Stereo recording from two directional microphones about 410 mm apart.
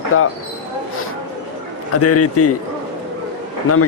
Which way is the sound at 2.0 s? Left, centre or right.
Left.